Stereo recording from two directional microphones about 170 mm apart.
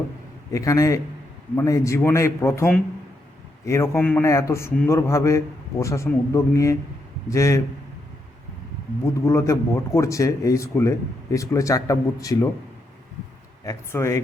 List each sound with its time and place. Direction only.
0.5 s a man's voice: 20° left (ahead or behind)
9.0 s speech: 15° left (ahead or behind)
13.7 s a man's voice: 15° left (ahead or behind)